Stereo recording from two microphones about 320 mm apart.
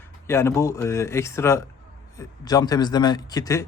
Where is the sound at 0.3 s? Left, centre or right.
Centre.